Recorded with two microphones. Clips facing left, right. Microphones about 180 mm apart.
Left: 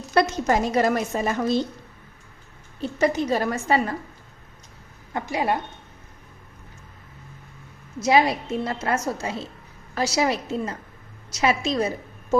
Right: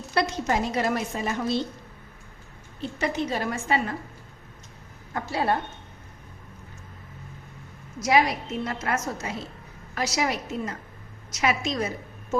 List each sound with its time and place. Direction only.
0.1 s a woman's voice: 45° left (ahead or behind)
2.8 s a woman's voice: 40° left (ahead or behind)
5.1 s a woman's voice: 15° left (ahead or behind)
7.9 s a woman's voice: 25° left (ahead or behind)